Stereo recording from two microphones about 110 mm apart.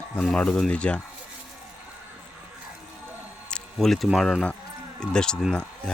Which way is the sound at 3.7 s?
Centre (ahead or behind).